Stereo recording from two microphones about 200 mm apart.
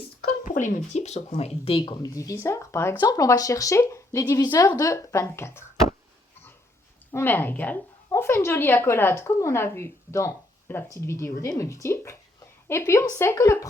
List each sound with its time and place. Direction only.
0.3 s a sound: 40° left (ahead or behind)
0.9 s speech: 35° left (ahead or behind); by 5.6 s 15° left (ahead or behind)
7.1 s speech: 10° left (ahead or behind)